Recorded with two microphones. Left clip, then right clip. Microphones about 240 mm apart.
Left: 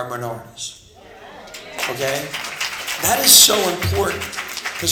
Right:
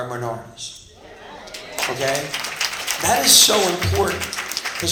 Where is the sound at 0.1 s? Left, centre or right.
Left.